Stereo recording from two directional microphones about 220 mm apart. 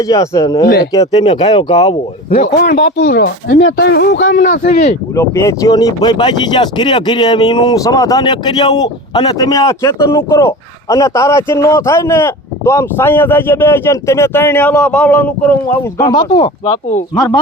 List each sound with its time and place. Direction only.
0.0 s speech: 15° left (ahead or behind)
2.6 s speech: 50° left (ahead or behind); by 4.9 s 35° left (ahead or behind)
5.1 s speech: 15° left (ahead or behind)
16.0 s speech: 20° left (ahead or behind)